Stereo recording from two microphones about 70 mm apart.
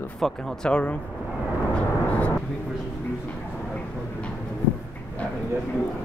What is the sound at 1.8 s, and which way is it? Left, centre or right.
Vehicle, left.